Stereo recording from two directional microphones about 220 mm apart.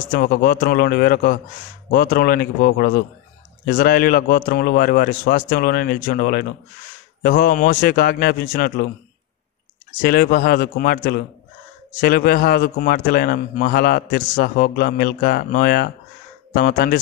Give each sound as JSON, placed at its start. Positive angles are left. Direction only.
{"t": 0.1, "sound": "a man's voice", "side_deg": 45}
{"t": 10.0, "sound": "a man's voice", "side_deg": 45}